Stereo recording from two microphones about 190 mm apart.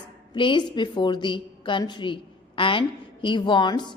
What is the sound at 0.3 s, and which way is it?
A woman's voice, 25° left (ahead or behind).